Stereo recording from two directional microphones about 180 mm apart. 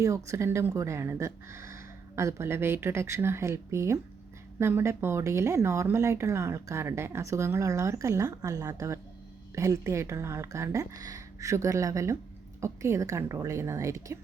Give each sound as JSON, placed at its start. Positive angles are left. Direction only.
{"t": 0.0, "sound": "speech", "side_deg": -15}